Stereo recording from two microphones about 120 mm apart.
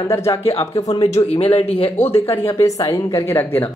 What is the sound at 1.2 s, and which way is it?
Speech, 55° left (ahead or behind).